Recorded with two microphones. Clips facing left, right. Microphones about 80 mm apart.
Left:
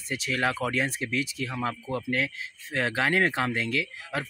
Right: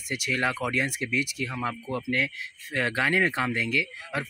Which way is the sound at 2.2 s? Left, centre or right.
Centre.